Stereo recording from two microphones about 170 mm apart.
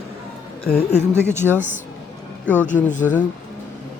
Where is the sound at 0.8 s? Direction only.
40° left (ahead or behind).